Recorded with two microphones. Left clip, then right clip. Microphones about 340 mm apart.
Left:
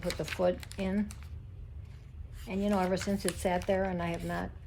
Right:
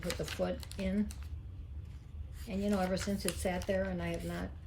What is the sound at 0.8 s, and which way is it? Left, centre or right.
Speech, centre.